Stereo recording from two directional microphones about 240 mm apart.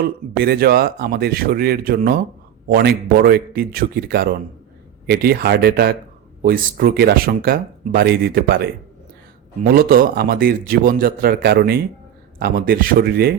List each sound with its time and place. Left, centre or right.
0.0 s speech: right